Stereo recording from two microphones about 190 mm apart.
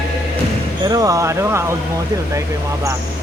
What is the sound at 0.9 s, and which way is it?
Speech, 20° right (ahead or behind).